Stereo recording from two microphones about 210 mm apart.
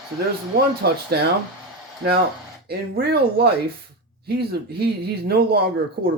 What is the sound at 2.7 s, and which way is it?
Speech, 50° right (ahead or behind).